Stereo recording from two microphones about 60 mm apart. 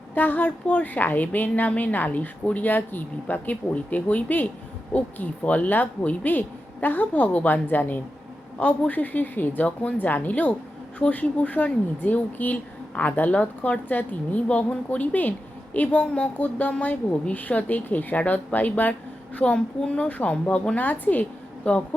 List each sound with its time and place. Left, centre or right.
0.1 s a woman's voice: left
19.4 s a woman's voice: centre